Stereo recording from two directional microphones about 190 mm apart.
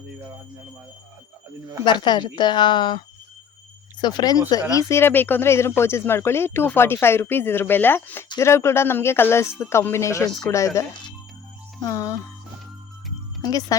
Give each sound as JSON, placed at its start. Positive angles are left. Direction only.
{"t": 1.8, "sound": "a woman's voice", "side_deg": 25}
{"t": 4.0, "sound": "a woman's voice", "side_deg": 20}
{"t": 13.4, "sound": "a woman's voice", "side_deg": 20}